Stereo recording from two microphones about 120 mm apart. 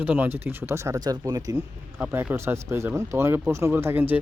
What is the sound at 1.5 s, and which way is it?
Speech, 15° right (ahead or behind).